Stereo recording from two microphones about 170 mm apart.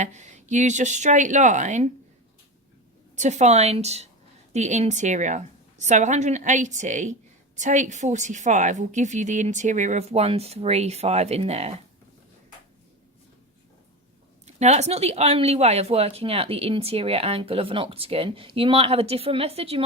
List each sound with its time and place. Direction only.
0.0 s a woman's voice: 45° right (ahead or behind)
3.2 s a woman's voice: 45° right (ahead or behind)
14.4 s speech: 40° right (ahead or behind)